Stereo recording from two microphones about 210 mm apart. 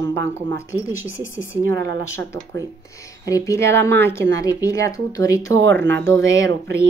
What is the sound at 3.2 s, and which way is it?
A woman's voice, 15° left (ahead or behind).